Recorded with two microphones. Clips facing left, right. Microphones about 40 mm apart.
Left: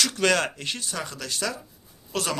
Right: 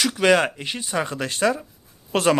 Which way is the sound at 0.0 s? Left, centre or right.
Centre.